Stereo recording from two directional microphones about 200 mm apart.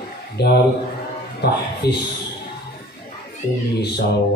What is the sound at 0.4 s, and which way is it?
A man's voice, 55° left (ahead or behind).